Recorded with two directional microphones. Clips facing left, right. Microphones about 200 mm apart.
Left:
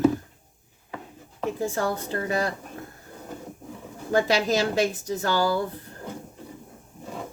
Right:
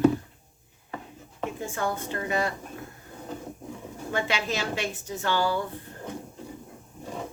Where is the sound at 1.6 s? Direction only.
35° left (ahead or behind).